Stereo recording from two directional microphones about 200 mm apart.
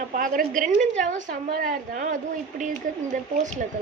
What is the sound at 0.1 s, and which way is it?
A woman's voice, 45° right (ahead or behind).